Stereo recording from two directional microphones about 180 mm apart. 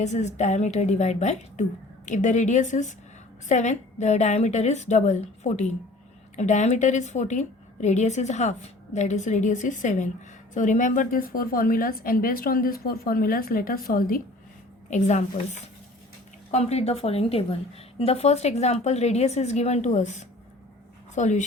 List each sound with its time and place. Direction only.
0.0 s a woman's voice: 40° left (ahead or behind)
14.8 s a woman's voice: 40° left (ahead or behind)